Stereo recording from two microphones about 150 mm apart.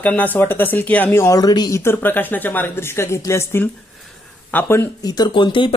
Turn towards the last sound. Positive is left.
turn(degrees=35)  # may be behind; listen again after turning